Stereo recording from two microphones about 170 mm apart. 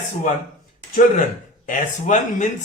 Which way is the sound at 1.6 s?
45° left (ahead or behind).